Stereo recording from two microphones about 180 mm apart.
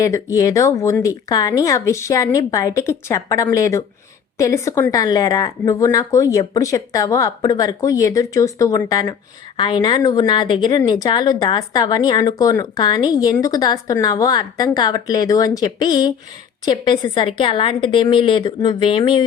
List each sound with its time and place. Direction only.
0.0 s a woman's voice: 20° left (ahead or behind)